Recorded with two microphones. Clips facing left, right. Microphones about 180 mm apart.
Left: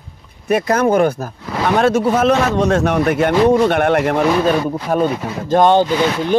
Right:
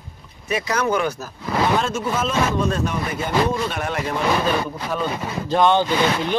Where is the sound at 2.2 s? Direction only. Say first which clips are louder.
Left 7 dB; 70° left (ahead or behind).